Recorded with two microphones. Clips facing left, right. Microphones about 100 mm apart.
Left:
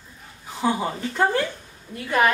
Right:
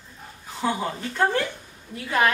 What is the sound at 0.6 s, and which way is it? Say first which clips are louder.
A woman's voice: left 3 dB; 5° left (ahead or behind).